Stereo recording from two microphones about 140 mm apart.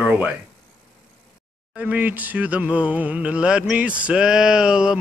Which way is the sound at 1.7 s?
10° right (ahead or behind).